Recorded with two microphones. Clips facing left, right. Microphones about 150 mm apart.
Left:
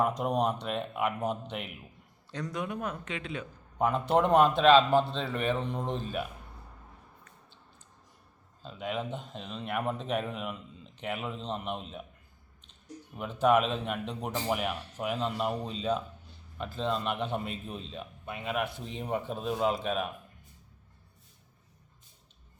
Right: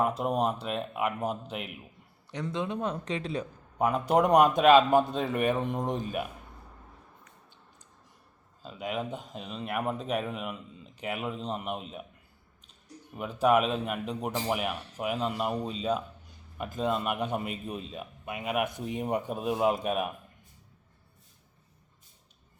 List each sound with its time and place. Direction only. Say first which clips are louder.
0.0 s speech: right 1 dB; 5° right (ahead or behind)
2.3 s speech: right 3 dB; 25° right (ahead or behind)
3.8 s a man's voice: right 1 dB; 10° right (ahead or behind)
8.6 s speech: right 1 dB; 5° right (ahead or behind)
13.1 s a man's voice: right 1 dB; 5° right (ahead or behind)